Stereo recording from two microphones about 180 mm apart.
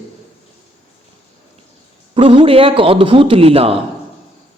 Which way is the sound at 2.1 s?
30° right (ahead or behind).